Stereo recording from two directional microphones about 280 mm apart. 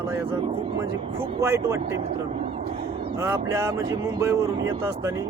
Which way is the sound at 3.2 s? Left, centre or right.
Centre.